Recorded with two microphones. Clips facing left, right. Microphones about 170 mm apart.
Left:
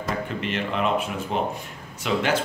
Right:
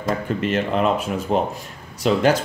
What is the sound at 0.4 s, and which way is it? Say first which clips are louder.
Speech: right 6 dB; 40° right (ahead or behind).